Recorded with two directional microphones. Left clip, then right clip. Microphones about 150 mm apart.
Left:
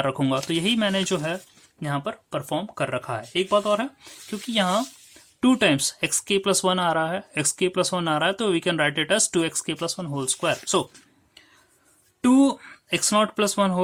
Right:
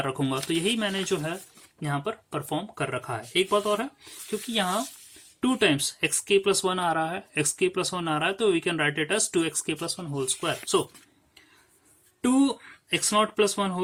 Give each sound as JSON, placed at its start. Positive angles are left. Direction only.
{"t": 0.0, "sound": "speech", "side_deg": 40}
{"t": 12.2, "sound": "speech", "side_deg": 45}